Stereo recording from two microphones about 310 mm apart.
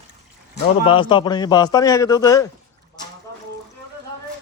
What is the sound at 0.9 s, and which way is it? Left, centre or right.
A man's voice, centre.